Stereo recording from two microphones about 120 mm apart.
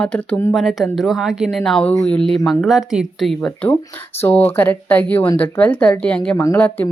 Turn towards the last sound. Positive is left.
turn(degrees=20)  # may be behind; listen again after turning